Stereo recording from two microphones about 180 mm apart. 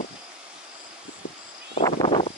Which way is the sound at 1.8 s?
25° left (ahead or behind).